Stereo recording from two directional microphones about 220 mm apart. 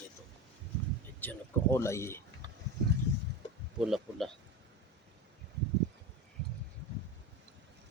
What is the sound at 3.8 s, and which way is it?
Speech, centre (ahead or behind).